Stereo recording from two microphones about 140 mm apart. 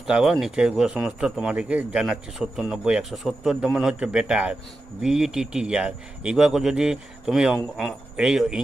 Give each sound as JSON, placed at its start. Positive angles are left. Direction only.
{"t": 0.1, "sound": "speech", "side_deg": -5}